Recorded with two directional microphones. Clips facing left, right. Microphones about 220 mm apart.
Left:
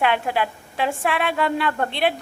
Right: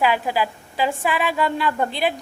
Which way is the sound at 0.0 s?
Centre (ahead or behind).